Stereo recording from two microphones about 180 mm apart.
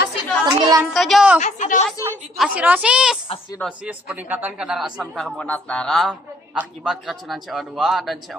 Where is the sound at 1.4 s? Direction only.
40° left (ahead or behind).